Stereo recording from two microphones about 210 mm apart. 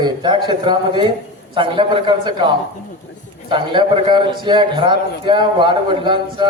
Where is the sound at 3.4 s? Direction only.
20° right (ahead or behind).